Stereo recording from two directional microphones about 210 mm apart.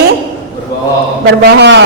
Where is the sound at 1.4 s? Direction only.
55° right (ahead or behind).